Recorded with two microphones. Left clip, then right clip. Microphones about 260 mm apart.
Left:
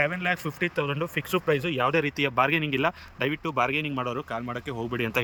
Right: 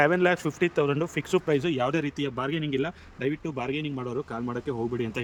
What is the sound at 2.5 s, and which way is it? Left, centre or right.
Speech, left.